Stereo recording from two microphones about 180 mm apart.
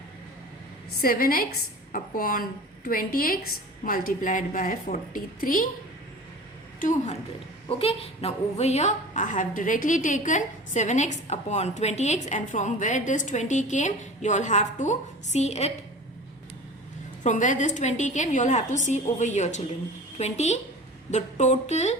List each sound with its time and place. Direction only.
1.0 s a woman's voice: 55° left (ahead or behind)
6.7 s a woman's voice: 45° left (ahead or behind)
7.7 s a woman's voice: 30° left (ahead or behind)
17.2 s a woman's voice: 45° left (ahead or behind)